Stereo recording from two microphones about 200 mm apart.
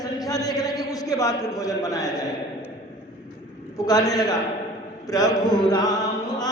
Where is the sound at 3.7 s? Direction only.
20° left (ahead or behind).